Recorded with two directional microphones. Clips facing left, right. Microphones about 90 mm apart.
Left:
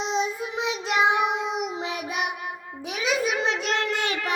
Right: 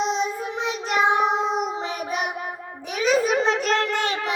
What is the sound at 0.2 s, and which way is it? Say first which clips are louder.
Child singing: right 1 dB; 40° right (ahead or behind).